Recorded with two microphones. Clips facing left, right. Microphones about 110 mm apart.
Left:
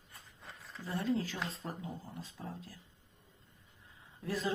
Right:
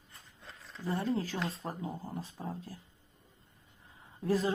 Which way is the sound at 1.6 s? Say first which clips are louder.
Right 4 dB; 35° right (ahead or behind).